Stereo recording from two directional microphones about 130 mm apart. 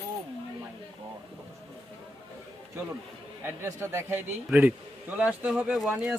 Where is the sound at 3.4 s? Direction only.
20° right (ahead or behind).